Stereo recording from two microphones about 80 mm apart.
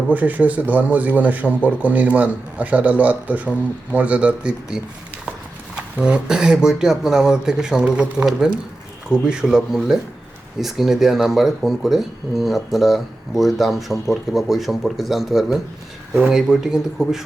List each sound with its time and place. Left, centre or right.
0.1 s a man's voice: centre